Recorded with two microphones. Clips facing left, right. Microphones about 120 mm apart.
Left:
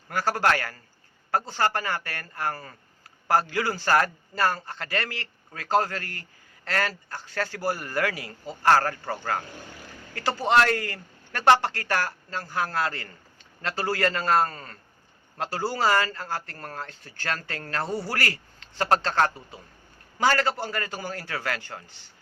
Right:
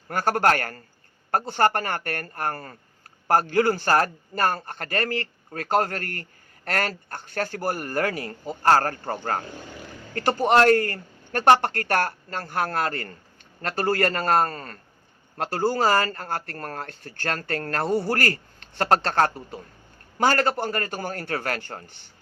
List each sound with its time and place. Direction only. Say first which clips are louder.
0.1 s speech: right 3 dB; 50° right (ahead or behind)